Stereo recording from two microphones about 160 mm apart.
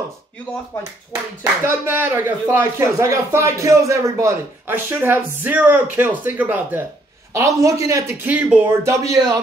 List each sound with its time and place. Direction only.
1.4 s speech: 15° right (ahead or behind)